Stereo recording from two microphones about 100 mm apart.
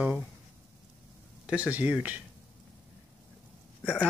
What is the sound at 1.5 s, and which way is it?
Speech, 15° right (ahead or behind).